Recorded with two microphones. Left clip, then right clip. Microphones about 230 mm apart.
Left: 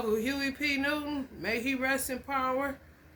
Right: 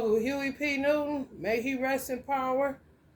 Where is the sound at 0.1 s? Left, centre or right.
Left.